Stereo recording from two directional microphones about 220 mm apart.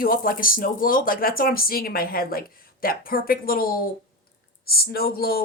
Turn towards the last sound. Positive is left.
turn(degrees=45)  # may be behind; listen again after turning